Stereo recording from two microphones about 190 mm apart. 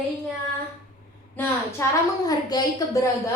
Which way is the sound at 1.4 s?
15° left (ahead or behind).